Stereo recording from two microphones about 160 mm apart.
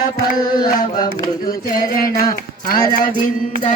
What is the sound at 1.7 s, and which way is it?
Music, 65° left (ahead or behind).